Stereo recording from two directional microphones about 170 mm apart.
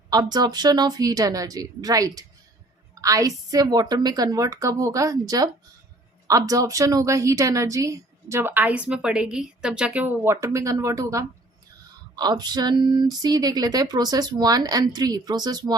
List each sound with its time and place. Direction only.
0.1 s a woman's voice: 25° right (ahead or behind)